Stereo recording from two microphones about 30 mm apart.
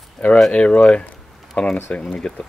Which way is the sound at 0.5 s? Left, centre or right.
Left.